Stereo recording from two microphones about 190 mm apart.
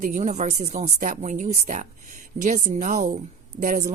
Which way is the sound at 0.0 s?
40° right (ahead or behind).